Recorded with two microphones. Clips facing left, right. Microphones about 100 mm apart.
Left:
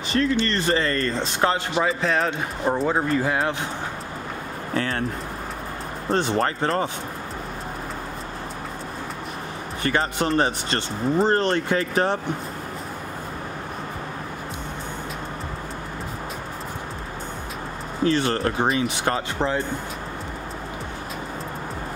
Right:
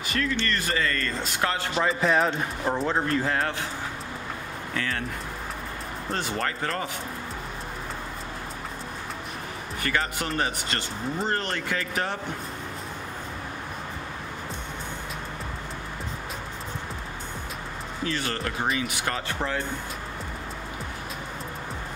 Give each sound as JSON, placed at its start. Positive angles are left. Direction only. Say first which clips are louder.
{"t": 0.1, "sound": "a man's voice", "louder": "left 6 dB", "side_deg": 30}
{"t": 1.9, "sound": "speech", "louder": "even", "side_deg": 0}
{"t": 2.9, "sound": "speech", "louder": "left 3 dB", "side_deg": 10}
{"t": 4.7, "sound": "speech", "louder": "left 5 dB", "side_deg": 35}
{"t": 6.0, "sound": "speech", "louder": "left 8 dB", "side_deg": 30}
{"t": 9.8, "sound": "speech", "louder": "left 6 dB", "side_deg": 30}
{"t": 18.0, "sound": "a man's voice", "louder": "left 9 dB", "side_deg": 35}